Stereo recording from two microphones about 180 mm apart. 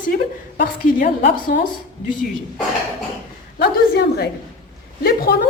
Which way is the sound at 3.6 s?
65° left (ahead or behind).